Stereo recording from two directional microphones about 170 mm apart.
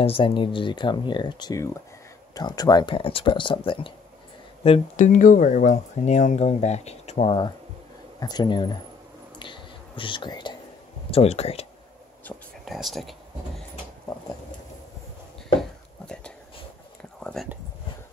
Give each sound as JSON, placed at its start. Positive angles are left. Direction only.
{"t": 0.0, "sound": "speech", "side_deg": 30}
{"t": 5.0, "sound": "speech", "side_deg": 50}
{"t": 9.4, "sound": "whispering", "side_deg": 30}
{"t": 11.1, "sound": "speech", "side_deg": 35}
{"t": 12.6, "sound": "speech", "side_deg": 0}
{"t": 17.2, "sound": "a sound", "side_deg": 5}